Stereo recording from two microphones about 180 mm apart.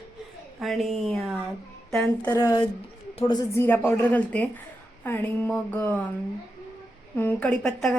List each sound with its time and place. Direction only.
0.6 s a woman's voice: centre (ahead or behind)
2.3 s a woman's voice: 20° left (ahead or behind)
7.2 s a woman's voice: 10° left (ahead or behind)